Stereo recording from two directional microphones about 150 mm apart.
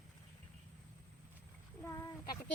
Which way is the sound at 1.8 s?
20° left (ahead or behind).